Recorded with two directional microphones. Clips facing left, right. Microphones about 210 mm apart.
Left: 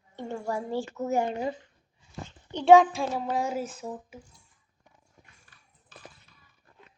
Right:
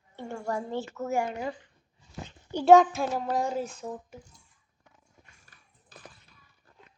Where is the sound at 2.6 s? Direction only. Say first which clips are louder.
Left 1 dB; centre (ahead or behind).